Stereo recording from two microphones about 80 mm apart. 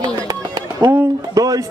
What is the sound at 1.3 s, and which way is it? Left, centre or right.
Speech, right.